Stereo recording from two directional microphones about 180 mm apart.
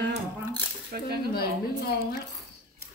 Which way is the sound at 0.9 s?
55° right (ahead or behind).